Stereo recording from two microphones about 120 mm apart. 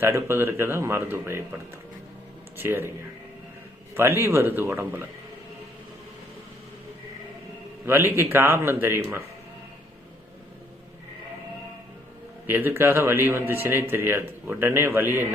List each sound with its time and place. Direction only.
0.0 s a man's voice: 20° right (ahead or behind)
2.6 s a man's voice: 20° right (ahead or behind)
3.9 s a man's voice: 20° right (ahead or behind)
7.9 s a man's voice: 20° right (ahead or behind)
12.5 s a man's voice: 15° right (ahead or behind)